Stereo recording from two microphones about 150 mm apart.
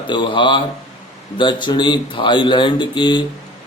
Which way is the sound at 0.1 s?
35° left (ahead or behind).